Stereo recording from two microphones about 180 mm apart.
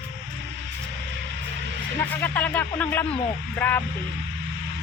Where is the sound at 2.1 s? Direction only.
10° left (ahead or behind).